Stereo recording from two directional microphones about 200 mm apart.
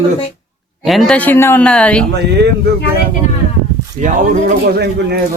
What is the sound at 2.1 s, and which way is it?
Speech, 55° right (ahead or behind).